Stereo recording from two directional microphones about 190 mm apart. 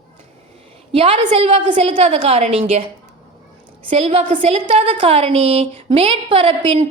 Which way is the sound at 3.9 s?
30° right (ahead or behind).